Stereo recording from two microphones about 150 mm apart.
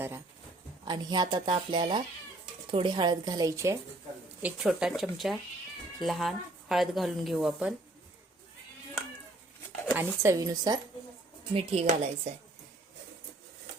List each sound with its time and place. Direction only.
0.9 s speech: 30° right (ahead or behind)
4.4 s a woman's voice: 5° right (ahead or behind)
9.9 s speech: 5° right (ahead or behind)
10.2 s speech: 25° right (ahead or behind)
11.5 s speech: 45° right (ahead or behind)